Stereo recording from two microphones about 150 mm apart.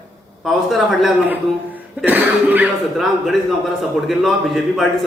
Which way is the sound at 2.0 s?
10° right (ahead or behind).